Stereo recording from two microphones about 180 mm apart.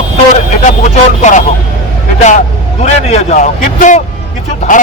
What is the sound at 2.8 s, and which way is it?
A man's voice, 35° left (ahead or behind).